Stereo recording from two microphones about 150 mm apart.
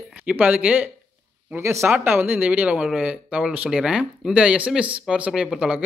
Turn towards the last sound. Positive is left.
turn(degrees=-5)  # may be behind; listen again after turning